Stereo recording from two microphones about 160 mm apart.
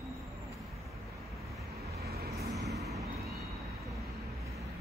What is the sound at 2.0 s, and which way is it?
Vehicle, 80° right.